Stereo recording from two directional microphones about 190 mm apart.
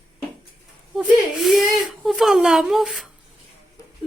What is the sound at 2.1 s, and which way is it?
A woman's voice, centre (ahead or behind).